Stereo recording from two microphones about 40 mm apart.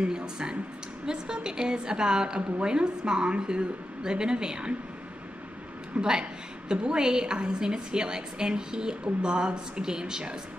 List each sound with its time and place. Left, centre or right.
0.0 s a woman's voice: right
5.9 s a woman's voice: centre